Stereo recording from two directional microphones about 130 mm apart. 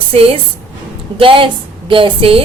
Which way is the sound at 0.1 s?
50° right (ahead or behind).